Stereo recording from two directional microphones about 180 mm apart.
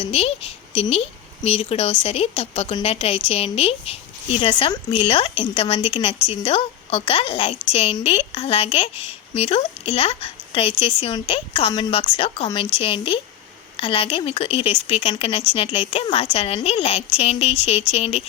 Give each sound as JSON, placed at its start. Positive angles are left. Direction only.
{"t": 0.0, "sound": "speech", "side_deg": 35}